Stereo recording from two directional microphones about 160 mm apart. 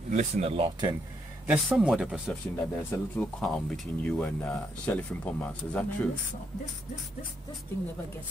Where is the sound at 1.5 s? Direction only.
5° right (ahead or behind).